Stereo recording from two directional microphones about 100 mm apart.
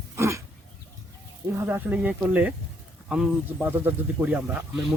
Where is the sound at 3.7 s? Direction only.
20° right (ahead or behind).